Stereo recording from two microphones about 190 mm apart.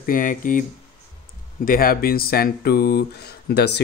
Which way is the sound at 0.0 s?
45° left (ahead or behind).